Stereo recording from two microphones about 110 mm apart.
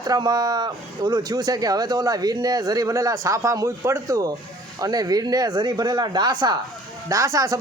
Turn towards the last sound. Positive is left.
turn(degrees=-30)  # may be behind; listen again after turning